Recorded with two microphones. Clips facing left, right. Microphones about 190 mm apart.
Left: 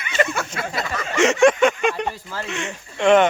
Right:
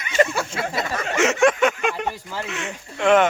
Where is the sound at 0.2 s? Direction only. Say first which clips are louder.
Right 2 dB; 30° right (ahead or behind).